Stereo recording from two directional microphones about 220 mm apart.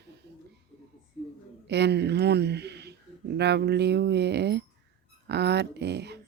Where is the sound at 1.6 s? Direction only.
50° right (ahead or behind).